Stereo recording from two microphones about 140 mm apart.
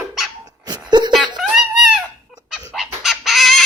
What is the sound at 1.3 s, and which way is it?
Wail, 5° right (ahead or behind).